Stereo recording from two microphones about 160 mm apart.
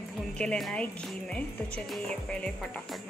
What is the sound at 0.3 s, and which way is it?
A woman's voice, 5° left (ahead or behind).